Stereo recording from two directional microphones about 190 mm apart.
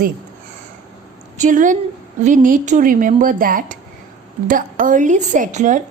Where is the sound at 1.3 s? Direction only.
40° right (ahead or behind).